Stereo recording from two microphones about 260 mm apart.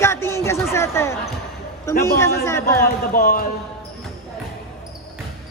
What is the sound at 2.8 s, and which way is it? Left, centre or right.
Speech, left.